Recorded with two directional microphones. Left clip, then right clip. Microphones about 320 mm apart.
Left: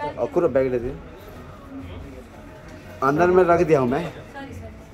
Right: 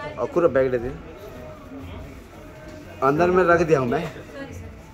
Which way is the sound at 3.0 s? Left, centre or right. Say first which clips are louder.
Left 1 dB; centre.